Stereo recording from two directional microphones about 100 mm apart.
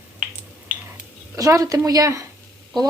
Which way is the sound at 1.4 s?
35° right (ahead or behind).